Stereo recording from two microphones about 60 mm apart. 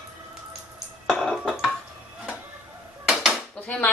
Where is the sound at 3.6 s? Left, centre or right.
Centre.